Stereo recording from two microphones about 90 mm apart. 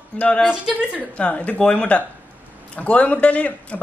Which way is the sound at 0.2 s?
15° left (ahead or behind).